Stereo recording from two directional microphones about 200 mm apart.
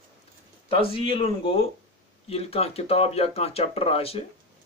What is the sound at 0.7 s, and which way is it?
Speech, 25° left (ahead or behind).